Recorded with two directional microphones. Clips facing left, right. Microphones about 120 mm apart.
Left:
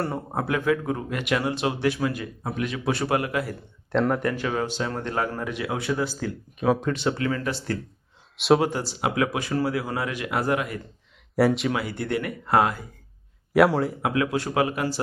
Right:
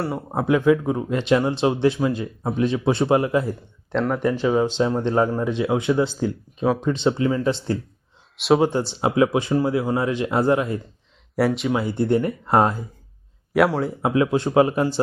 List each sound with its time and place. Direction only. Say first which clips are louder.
0.0 s speech: right 3 dB; 5° right (ahead or behind); by 3.5 s 25° right (ahead or behind)
3.9 s a man's voice: right 1 dB; centre (ahead or behind)
4.4 s speech: right 7 dB; 20° right (ahead or behind)
6.7 s a man's voice: right 2 dB; centre (ahead or behind)
6.9 s speech: right 5 dB; 25° right (ahead or behind)
8.4 s a man's voice: right 1 dB; centre (ahead or behind)
8.6 s speech: right 5 dB; 25° right (ahead or behind)
11.3 s a man's voice: even; centre (ahead or behind)
11.7 s speech: right 6 dB; 25° right (ahead or behind)
13.5 s a man's voice: even; centre (ahead or behind)
14.0 s speech: right 5 dB; 25° right (ahead or behind)